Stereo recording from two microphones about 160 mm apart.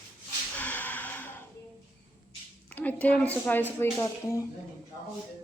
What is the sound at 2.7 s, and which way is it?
A woman's voice, 10° left (ahead or behind).